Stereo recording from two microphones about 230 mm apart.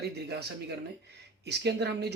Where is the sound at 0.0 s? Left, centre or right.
Right.